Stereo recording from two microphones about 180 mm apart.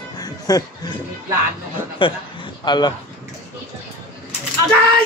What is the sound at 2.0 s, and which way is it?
Speech, 30° left (ahead or behind).